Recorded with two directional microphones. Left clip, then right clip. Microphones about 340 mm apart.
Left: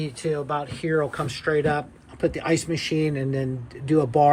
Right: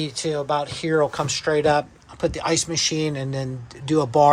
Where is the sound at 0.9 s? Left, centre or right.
Right.